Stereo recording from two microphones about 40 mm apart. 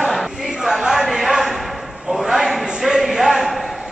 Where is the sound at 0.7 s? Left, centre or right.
Centre.